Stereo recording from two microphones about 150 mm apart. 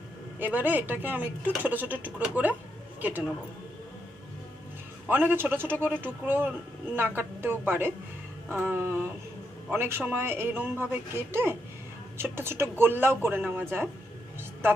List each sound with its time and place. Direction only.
0.3 s speech: 10° right (ahead or behind)
5.0 s speech: 10° right (ahead or behind)